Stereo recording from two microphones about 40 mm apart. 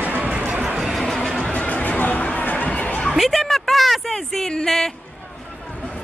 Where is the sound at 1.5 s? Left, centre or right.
Left.